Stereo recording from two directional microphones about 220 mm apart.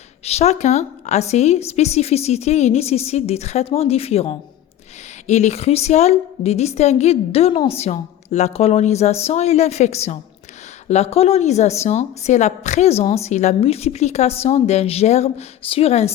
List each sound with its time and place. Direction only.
0.3 s a woman's voice: 30° left (ahead or behind)